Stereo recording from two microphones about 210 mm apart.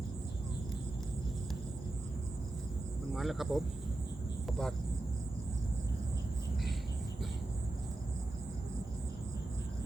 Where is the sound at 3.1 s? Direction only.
Centre (ahead or behind).